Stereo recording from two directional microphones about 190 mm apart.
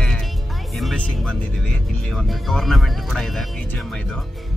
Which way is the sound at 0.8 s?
Centre (ahead or behind).